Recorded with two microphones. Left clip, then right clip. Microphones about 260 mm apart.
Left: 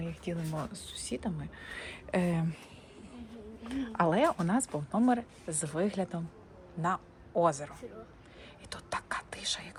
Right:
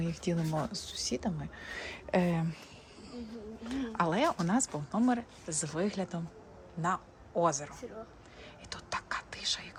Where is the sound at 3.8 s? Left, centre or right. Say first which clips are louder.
Left 2 dB; centre.